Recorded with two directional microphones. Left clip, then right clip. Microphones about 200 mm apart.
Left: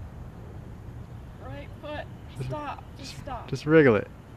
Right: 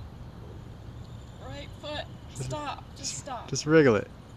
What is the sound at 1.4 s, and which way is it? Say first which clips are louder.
Vehicle: even; centre (ahead or behind).